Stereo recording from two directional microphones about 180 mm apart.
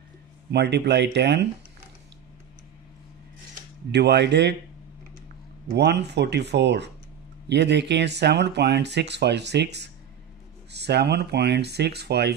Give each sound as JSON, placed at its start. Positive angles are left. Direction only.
{"t": 0.5, "sound": "speech", "side_deg": -70}
{"t": 3.9, "sound": "speech", "side_deg": -70}
{"t": 5.7, "sound": "speech", "side_deg": -70}